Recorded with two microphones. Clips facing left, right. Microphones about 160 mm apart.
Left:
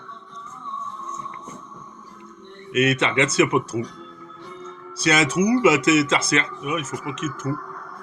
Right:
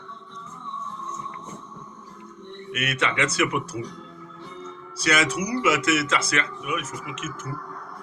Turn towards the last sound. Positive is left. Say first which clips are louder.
# left 6 dB
turn(degrees=35)  # may be behind; listen again after turning